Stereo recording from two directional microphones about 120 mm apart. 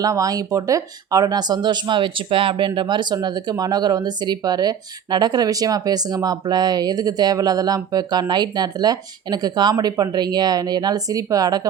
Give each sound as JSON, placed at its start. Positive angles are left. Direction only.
{"t": 0.0, "sound": "speech", "side_deg": -30}